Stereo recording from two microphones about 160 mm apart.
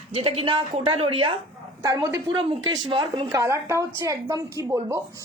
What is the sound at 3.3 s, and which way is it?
Speech, 15° right (ahead or behind).